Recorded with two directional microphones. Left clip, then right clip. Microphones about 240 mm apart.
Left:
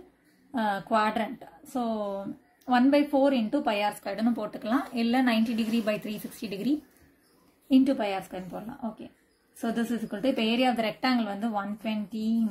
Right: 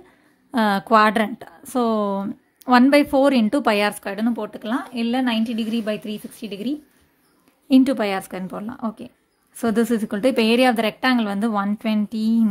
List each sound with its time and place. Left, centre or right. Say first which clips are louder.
0.5 s a woman's voice: right 9 dB; right
7.6 s a woman's voice: right 7 dB; right